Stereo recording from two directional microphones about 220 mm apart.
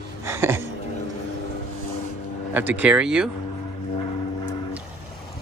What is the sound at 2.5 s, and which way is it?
Speech, 10° right (ahead or behind).